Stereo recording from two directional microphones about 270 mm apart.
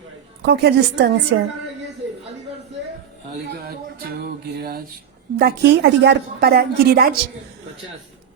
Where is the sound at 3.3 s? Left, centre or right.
Right.